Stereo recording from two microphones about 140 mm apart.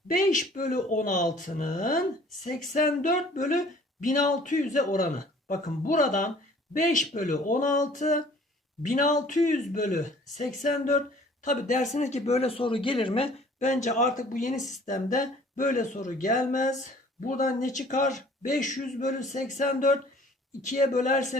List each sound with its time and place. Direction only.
0.1 s a man's voice: 70° left (ahead or behind); by 13.7 s 45° left (ahead or behind)
13.7 s speech: 60° left (ahead or behind)